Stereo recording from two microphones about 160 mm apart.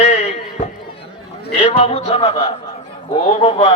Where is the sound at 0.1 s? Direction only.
45° left (ahead or behind).